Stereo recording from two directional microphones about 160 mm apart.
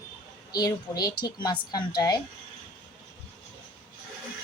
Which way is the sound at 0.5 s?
25° left (ahead or behind).